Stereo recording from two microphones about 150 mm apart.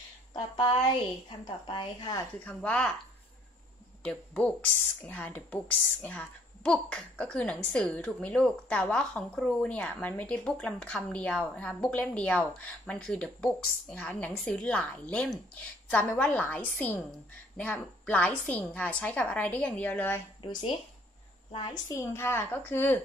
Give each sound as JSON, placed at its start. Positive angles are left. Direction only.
{"t": 1.4, "sound": "a woman's voice", "side_deg": 30}
{"t": 2.4, "sound": "speech", "side_deg": 5}
{"t": 4.0, "sound": "a woman's voice", "side_deg": 5}
{"t": 20.4, "sound": "a woman's voice", "side_deg": 35}
{"t": 21.8, "sound": "a woman's voice", "side_deg": 20}